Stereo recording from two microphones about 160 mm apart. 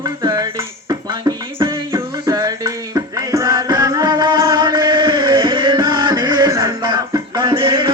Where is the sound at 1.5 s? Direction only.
25° right (ahead or behind).